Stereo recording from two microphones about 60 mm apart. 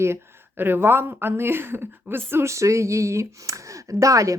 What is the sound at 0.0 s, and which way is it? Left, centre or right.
Speech, right.